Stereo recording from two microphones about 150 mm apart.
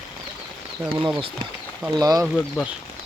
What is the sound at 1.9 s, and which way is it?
Speech, 25° right (ahead or behind).